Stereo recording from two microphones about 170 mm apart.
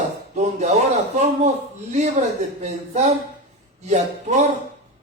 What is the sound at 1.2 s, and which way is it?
A man's voice, 40° right (ahead or behind).